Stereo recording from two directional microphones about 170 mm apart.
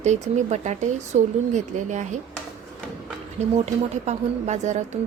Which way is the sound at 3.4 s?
40° right (ahead or behind).